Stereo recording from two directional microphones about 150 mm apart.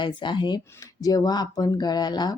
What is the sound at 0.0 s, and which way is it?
Speech, 30° left (ahead or behind).